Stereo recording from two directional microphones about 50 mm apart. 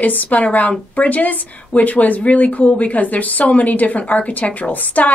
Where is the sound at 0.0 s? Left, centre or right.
Left.